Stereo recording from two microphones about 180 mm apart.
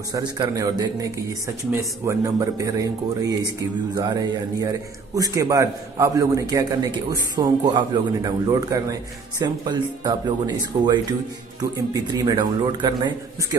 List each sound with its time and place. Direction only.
0.1 s a man's voice: 20° right (ahead or behind)